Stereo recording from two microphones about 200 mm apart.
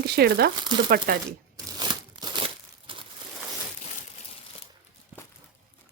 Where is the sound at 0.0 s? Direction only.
55° right (ahead or behind).